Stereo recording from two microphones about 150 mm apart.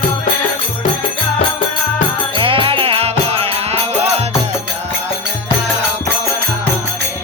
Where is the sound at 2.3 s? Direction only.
35° right (ahead or behind).